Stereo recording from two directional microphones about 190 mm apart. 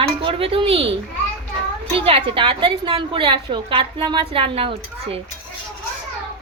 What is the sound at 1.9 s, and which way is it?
A woman's voice, 30° right (ahead or behind).